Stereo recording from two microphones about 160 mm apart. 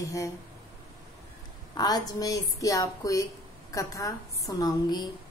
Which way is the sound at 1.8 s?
25° left (ahead or behind).